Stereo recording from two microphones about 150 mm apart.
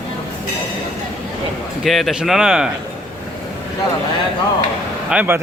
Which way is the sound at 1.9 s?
Centre (ahead or behind).